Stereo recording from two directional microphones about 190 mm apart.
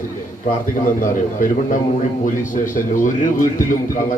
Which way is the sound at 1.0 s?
45° left (ahead or behind).